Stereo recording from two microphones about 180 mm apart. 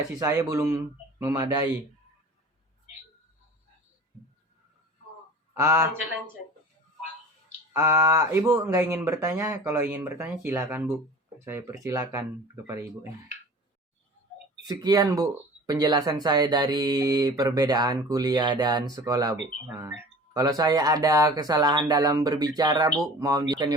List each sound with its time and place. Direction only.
0.2 s speech: 20° right (ahead or behind)
5.5 s speech: 15° right (ahead or behind)
7.7 s speech: 20° right (ahead or behind)
14.7 s speech: 20° right (ahead or behind)